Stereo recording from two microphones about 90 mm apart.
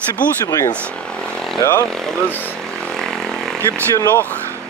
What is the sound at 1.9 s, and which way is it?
Speech, 5° left (ahead or behind).